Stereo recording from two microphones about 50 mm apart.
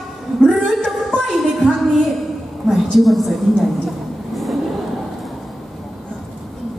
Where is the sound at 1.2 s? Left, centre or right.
Centre.